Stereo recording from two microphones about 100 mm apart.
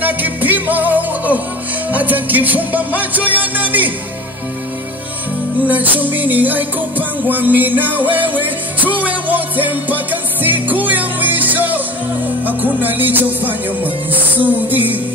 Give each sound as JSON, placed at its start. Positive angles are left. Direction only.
{"t": 0.0, "sound": "music", "side_deg": -15}
{"t": 5.7, "sound": "music", "side_deg": -15}